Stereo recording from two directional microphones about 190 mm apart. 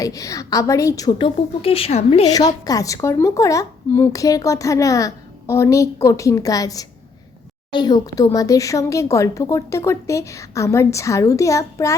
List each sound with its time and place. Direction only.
0.0 s speech: 15° left (ahead or behind)
1.4 s speech: 30° left (ahead or behind)
2.2 s a woman's voice: 20° left (ahead or behind)